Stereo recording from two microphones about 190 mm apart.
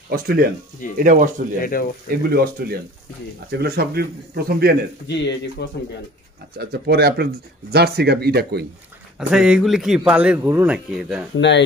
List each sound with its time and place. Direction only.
0.1 s speech: 50° right (ahead or behind)
1.6 s speech: 50° left (ahead or behind)
2.0 s speech: 50° right (ahead or behind)
5.0 s speech: 65° left (ahead or behind)
6.6 s speech: 55° right (ahead or behind)
9.3 s a man's voice: 5° right (ahead or behind)
11.3 s speech: 70° left (ahead or behind)